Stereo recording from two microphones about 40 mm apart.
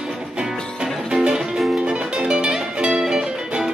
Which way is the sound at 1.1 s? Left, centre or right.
Centre.